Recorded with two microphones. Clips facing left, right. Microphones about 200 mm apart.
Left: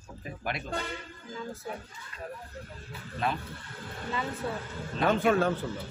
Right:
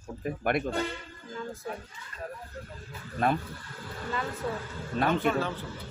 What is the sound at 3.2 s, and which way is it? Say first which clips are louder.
Speech: right 5 dB; 50° right (ahead or behind).